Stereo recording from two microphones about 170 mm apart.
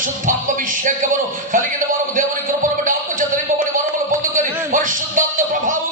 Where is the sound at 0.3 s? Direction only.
50° right (ahead or behind).